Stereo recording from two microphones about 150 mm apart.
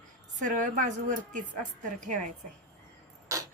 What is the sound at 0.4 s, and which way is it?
A woman's voice, 60° right (ahead or behind).